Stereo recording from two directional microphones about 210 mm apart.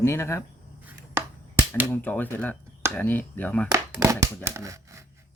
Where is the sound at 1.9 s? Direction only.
10° left (ahead or behind).